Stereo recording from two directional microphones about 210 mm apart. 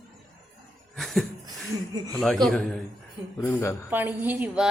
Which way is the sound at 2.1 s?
Centre (ahead or behind).